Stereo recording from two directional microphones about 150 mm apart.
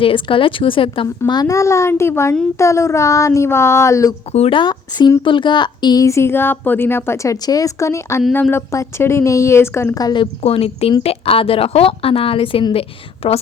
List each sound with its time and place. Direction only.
0.0 s a woman's voice: 35° left (ahead or behind)
1.0 s speech: 25° left (ahead or behind)
4.3 s a woman's voice: 40° left (ahead or behind)
10.4 s a woman's voice: 40° left (ahead or behind)